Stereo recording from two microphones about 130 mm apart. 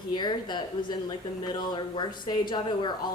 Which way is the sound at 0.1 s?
35° left (ahead or behind).